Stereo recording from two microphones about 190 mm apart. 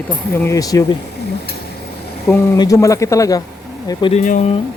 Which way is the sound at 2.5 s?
15° left (ahead or behind).